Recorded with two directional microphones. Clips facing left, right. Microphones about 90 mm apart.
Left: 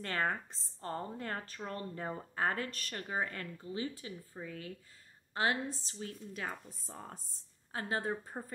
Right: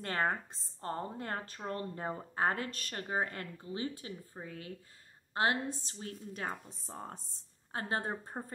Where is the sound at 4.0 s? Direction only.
30° right (ahead or behind).